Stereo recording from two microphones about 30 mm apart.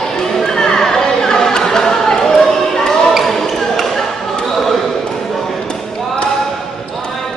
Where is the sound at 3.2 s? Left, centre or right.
Centre.